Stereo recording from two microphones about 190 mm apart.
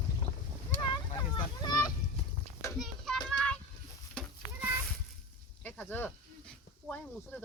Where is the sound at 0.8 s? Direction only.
25° left (ahead or behind).